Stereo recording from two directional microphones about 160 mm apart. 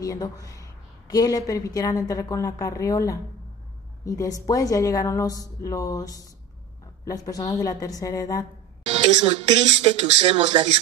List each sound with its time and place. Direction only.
0.0 s a woman's voice: 20° left (ahead or behind)
8.8 s a woman's voice: 40° right (ahead or behind)